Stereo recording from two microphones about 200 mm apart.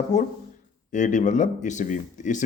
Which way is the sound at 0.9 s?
40° left (ahead or behind).